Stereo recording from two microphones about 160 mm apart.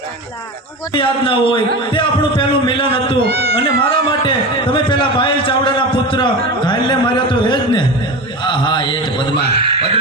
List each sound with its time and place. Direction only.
0.9 s a man's voice: 30° left (ahead or behind)
3.2 s speech: 85° right
3.5 s a man's voice: 35° left (ahead or behind)
9.7 s music: 40° right (ahead or behind)